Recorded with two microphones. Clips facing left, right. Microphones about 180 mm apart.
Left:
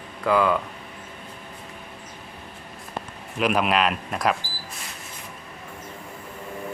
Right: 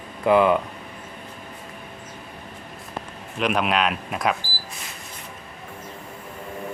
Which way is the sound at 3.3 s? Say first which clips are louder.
Left 1 dB; centre (ahead or behind).